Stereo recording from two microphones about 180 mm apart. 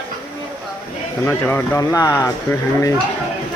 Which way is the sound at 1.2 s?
15° left (ahead or behind).